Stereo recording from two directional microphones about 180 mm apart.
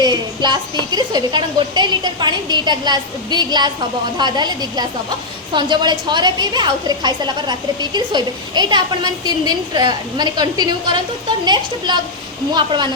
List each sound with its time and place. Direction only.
0.0 s a woman's voice: 25° right (ahead or behind)